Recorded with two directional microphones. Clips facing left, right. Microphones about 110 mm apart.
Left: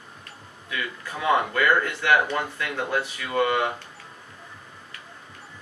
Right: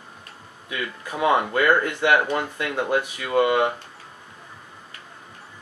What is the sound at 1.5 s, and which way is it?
Speech, 20° right (ahead or behind).